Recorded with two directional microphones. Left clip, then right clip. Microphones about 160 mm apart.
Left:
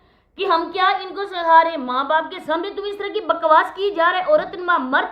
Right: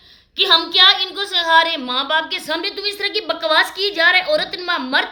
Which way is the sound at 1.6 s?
15° right (ahead or behind).